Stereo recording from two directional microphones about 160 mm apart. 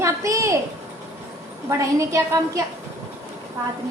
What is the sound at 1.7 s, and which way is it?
Speech, 20° right (ahead or behind).